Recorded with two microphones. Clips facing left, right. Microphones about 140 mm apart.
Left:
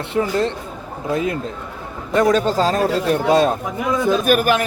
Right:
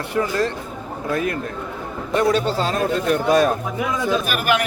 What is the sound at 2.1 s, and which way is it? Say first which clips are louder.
A man's voice: left 3 dB; 40° left (ahead or behind).